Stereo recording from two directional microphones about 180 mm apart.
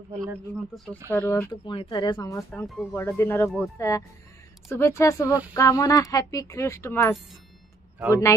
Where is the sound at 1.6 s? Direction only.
25° left (ahead or behind).